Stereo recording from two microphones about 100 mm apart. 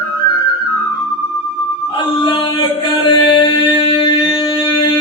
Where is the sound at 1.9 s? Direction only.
50° left (ahead or behind).